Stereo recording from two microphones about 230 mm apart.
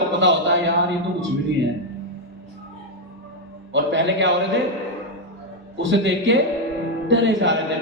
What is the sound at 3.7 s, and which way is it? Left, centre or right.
Speech, right.